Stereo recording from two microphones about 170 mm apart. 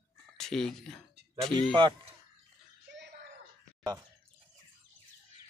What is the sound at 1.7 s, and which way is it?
Speech, 30° right (ahead or behind).